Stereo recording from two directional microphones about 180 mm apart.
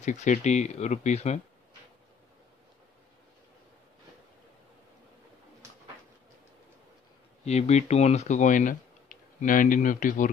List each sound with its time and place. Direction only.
0.0 s speech: 40° left (ahead or behind)
7.4 s speech: 35° left (ahead or behind)